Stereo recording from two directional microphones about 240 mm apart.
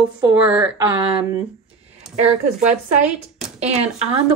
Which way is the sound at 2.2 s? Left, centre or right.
Right.